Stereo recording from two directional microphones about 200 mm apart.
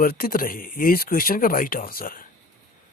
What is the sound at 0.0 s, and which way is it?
Speech, 45° left (ahead or behind).